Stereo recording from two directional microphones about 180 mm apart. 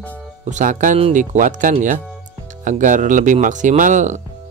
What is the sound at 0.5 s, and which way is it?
Speech, 45° right (ahead or behind).